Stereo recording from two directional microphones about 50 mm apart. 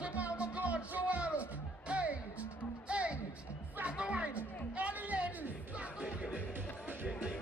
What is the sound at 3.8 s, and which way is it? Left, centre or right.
Speech, right.